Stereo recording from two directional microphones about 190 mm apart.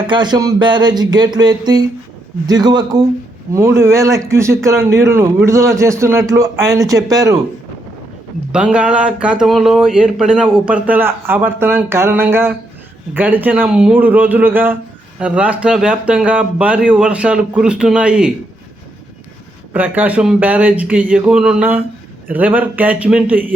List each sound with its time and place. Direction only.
0.1 s speech: 25° right (ahead or behind)
8.5 s speech: 5° right (ahead or behind)
19.7 s speech: 10° right (ahead or behind)
21.1 s a sound: 5° right (ahead or behind)
22.3 s speech: 10° right (ahead or behind)